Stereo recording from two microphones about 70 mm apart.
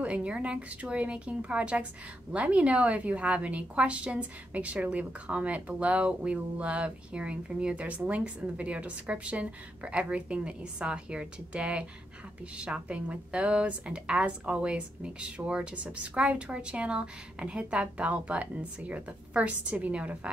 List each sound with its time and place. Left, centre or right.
0.0 s a woman's voice: centre